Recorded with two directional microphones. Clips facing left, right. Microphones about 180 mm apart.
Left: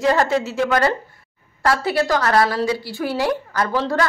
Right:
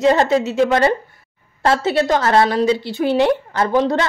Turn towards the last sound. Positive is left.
turn(degrees=-20)  # may be behind; listen again after turning